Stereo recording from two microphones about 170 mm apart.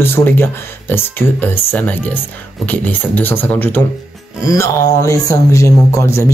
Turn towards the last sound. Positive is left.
turn(degrees=15)  # may be behind; listen again after turning